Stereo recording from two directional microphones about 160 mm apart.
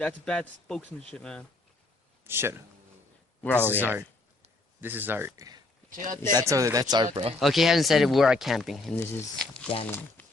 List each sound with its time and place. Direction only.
0.3 s speech: 5° left (ahead or behind)
2.2 s a man's voice: 15° right (ahead or behind)
3.4 s speech: 10° left (ahead or behind)
3.7 s a man's voice: 10° right (ahead or behind)
5.9 s speech: 55° right (ahead or behind)
6.3 s speech: 20° right (ahead or behind)
7.3 s speech: centre (ahead or behind)
9.0 s speech: 10° left (ahead or behind)